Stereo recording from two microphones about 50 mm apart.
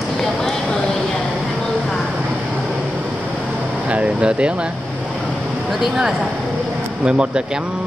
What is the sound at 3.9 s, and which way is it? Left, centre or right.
Speech, right.